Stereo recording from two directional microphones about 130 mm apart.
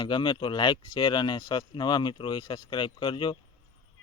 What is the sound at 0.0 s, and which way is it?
Speech, 35° left (ahead or behind).